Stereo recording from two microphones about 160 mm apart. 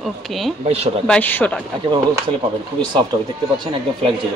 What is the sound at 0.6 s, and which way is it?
Speech, 40° right (ahead or behind).